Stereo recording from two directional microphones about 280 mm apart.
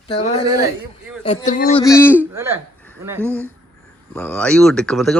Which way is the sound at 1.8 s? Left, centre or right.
Centre.